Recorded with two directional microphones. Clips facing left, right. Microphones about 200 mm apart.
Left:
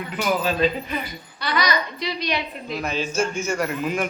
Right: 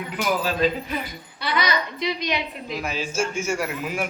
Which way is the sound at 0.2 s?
Centre (ahead or behind).